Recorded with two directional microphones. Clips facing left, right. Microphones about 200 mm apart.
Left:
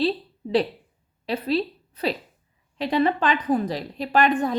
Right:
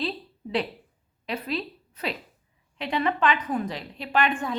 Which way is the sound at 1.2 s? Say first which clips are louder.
Left 6 dB; 35° left (ahead or behind).